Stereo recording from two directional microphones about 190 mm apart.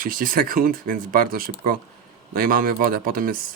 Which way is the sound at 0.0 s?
45° right (ahead or behind).